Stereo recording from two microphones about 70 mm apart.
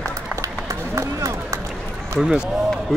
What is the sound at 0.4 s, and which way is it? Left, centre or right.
Run, right.